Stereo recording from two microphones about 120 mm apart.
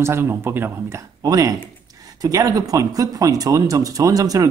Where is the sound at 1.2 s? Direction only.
30° right (ahead or behind).